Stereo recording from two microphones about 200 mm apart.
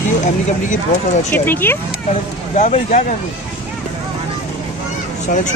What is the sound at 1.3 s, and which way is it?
Speech, 10° left (ahead or behind).